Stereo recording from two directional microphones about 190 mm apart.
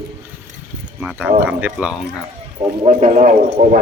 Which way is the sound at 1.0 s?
5° right (ahead or behind).